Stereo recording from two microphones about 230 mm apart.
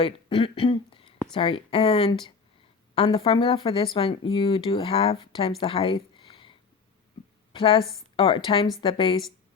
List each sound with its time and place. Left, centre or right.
0.0 s a woman's voice: left